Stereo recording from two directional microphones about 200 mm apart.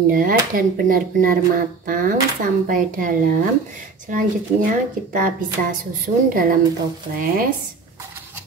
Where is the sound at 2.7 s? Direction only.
45° right (ahead or behind).